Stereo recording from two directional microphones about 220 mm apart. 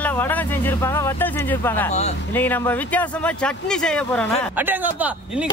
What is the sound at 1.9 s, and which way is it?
Speech, 30° left (ahead or behind).